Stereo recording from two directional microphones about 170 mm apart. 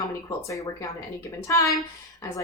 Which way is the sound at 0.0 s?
20° left (ahead or behind).